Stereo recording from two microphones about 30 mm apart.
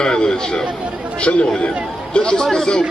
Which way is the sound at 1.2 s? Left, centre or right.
Left.